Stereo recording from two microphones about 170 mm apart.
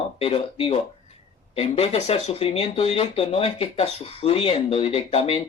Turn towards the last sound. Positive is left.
turn(degrees=35)  # may be behind; listen again after turning